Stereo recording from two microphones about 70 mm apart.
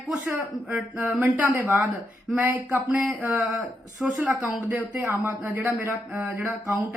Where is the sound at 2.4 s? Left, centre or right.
Right.